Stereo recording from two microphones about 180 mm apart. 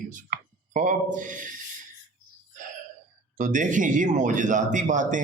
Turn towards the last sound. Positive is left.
turn(degrees=-45)  # may be behind; listen again after turning